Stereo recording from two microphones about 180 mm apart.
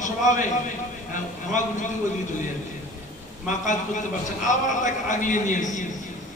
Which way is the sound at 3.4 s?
45° left (ahead or behind).